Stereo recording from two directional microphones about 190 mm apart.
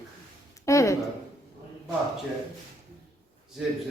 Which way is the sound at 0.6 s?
15° left (ahead or behind).